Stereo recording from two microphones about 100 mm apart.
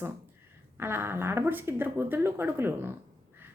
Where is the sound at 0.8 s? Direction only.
25° right (ahead or behind).